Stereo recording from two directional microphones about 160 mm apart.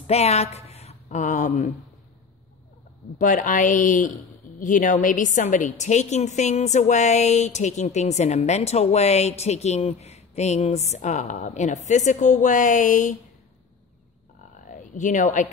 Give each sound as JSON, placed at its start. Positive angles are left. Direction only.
{"t": 0.0, "sound": "a woman's voice", "side_deg": 40}
{"t": 3.2, "sound": "speech", "side_deg": 55}
{"t": 14.7, "sound": "speech", "side_deg": 50}